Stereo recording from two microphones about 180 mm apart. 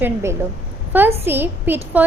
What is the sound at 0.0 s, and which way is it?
A woman's voice, 15° right (ahead or behind).